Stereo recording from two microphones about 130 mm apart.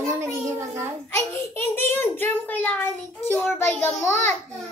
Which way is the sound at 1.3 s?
15° left (ahead or behind).